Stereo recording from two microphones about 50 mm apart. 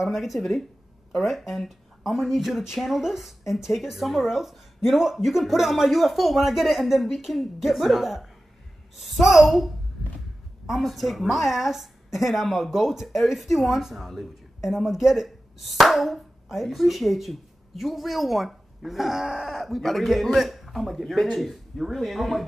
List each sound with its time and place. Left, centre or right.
0.0 s a woman's voice: centre
10.7 s a woman's voice: centre